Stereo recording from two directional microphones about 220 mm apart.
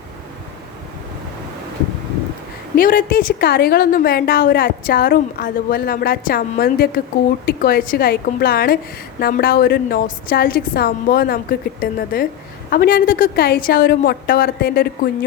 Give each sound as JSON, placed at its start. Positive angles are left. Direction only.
{"t": 2.7, "sound": "a woman's voice", "side_deg": 40}